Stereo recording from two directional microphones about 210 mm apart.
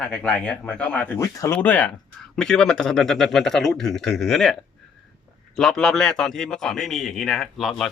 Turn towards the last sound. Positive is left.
turn(degrees=0)  # may be behind; listen again after turning